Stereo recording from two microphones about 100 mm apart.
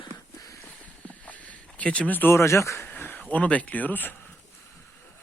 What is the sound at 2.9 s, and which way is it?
Speech, 15° left (ahead or behind).